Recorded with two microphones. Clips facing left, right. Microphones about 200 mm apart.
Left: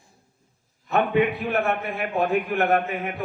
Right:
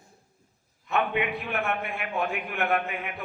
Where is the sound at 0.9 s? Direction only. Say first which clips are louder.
Left 6 dB; 40° left (ahead or behind).